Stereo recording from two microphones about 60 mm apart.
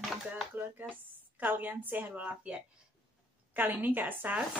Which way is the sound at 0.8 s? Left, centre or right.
Right.